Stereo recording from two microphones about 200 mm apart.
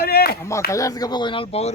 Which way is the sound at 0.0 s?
50° left (ahead or behind).